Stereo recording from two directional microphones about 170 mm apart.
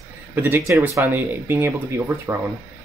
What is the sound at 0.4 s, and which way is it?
Speech, 15° right (ahead or behind).